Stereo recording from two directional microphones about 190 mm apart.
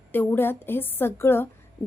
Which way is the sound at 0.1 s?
10° left (ahead or behind).